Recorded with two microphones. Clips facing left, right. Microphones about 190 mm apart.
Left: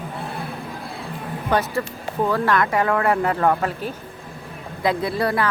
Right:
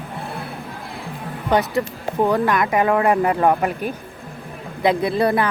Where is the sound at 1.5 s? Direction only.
15° right (ahead or behind).